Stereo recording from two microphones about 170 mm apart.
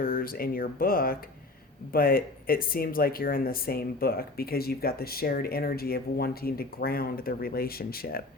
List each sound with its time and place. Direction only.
0.0 s speech: 60° left (ahead or behind)